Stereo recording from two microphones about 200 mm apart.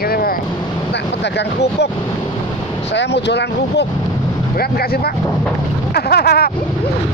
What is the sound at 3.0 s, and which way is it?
Speech, 55° left (ahead or behind).